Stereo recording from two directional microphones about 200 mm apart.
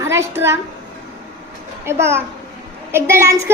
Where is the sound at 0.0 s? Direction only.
15° right (ahead or behind).